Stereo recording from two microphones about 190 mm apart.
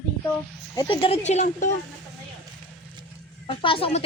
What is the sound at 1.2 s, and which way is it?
Speech, 40° left (ahead or behind).